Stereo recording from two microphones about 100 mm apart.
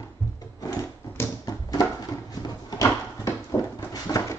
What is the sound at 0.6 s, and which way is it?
Drawer open or close, 30° left (ahead or behind).